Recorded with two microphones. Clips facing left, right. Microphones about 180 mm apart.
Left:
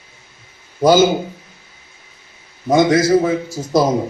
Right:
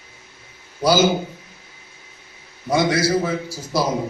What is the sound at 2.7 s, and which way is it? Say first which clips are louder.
A man's voice: left 6 dB; 45° left (ahead or behind).